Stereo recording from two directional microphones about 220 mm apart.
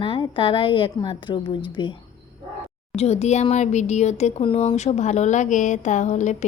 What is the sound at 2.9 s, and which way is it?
Speech, 30° left (ahead or behind).